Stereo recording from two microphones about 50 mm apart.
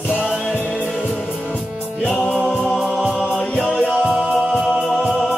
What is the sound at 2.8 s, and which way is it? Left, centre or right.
Music, centre.